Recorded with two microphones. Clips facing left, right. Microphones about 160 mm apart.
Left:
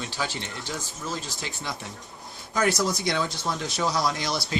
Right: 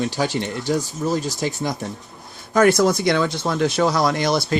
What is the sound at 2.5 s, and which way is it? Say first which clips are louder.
Speech: right 9 dB; 55° right (ahead or behind).